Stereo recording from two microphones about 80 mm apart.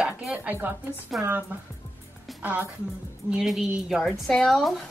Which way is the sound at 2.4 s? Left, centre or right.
Right.